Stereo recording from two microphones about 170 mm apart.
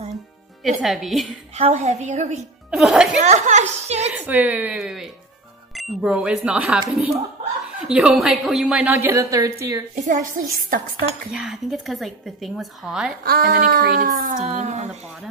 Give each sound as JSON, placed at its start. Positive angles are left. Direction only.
{"t": 0.7, "sound": "a woman's voice", "side_deg": 0}
{"t": 1.6, "sound": "speech", "side_deg": -40}
{"t": 2.7, "sound": "a woman's voice", "side_deg": -5}
{"t": 3.2, "sound": "a woman's voice", "side_deg": -45}
{"t": 4.1, "sound": "a woman's voice", "side_deg": -10}
{"t": 9.9, "sound": "speech", "side_deg": -45}
{"t": 10.7, "sound": "speech", "side_deg": -55}
{"t": 11.3, "sound": "a woman's voice", "side_deg": 0}
{"t": 13.2, "sound": "speech", "side_deg": -60}
{"t": 14.0, "sound": "speech", "side_deg": -50}